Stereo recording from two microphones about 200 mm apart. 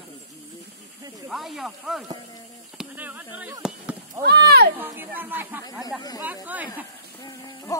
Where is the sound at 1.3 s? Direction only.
Centre (ahead or behind).